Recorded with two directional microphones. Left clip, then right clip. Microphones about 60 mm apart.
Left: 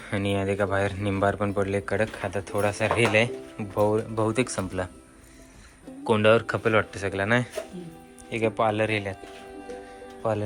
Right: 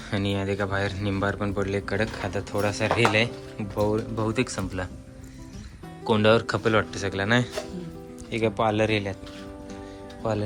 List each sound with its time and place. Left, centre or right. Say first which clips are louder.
0.1 s speech: left 1 dB; right
0.3 s speech: left 4 dB; centre
1.9 s speech: left 1 dB; right
6.1 s speech: even; right
10.2 s speech: left 1 dB; right